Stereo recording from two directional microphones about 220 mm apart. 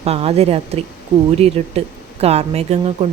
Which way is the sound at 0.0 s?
25° right (ahead or behind).